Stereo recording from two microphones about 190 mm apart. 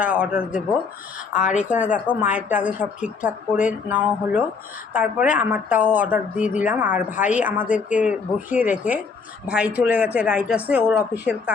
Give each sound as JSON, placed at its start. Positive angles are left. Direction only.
{"t": 0.0, "sound": "speech", "side_deg": -5}
{"t": 1.4, "sound": "speech", "side_deg": 40}
{"t": 2.3, "sound": "speech", "side_deg": -10}